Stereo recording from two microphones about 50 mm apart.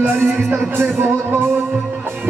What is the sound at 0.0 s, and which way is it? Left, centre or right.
Music, right.